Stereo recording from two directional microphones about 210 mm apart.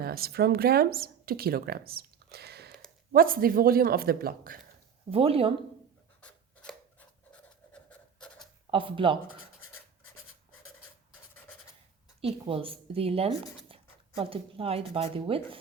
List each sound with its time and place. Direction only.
0.0 s speech: 45° right (ahead or behind)
5.1 s speech: 25° right (ahead or behind)
6.2 s scissors: 5° left (ahead or behind)
7.3 s pant: 5° left (ahead or behind)
8.7 s speech: 25° right (ahead or behind)
12.2 s speech: 25° right (ahead or behind)